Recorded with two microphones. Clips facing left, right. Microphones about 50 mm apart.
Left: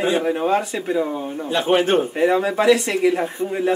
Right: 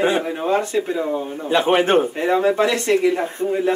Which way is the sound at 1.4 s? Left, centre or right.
Right.